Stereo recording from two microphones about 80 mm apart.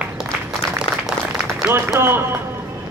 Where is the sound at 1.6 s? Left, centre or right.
Right.